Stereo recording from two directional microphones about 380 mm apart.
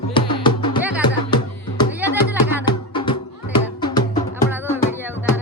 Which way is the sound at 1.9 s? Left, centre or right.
Centre.